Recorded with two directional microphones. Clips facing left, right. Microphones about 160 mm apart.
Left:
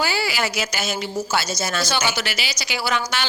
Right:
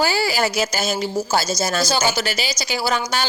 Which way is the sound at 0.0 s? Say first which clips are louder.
Right 4 dB; 40° right (ahead or behind).